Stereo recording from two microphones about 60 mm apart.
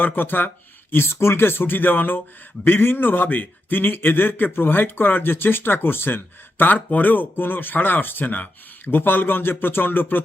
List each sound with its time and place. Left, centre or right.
0.0 s a man's voice: left